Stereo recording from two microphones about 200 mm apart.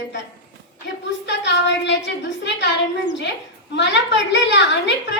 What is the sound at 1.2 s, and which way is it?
A child's voice, 60° left (ahead or behind).